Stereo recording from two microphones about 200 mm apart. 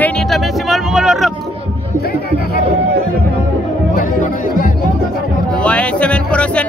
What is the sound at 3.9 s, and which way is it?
Speech, 45° left (ahead or behind).